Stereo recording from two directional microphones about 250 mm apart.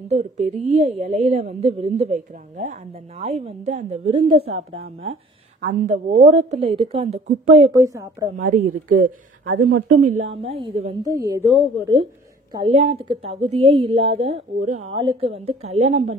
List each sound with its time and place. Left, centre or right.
0.1 s a woman's voice: right
7.7 s speech: centre
8.4 s speech: right
8.9 s speech: right
9.7 s speech: right
10.4 s a woman's voice: right
12.5 s a woman's voice: right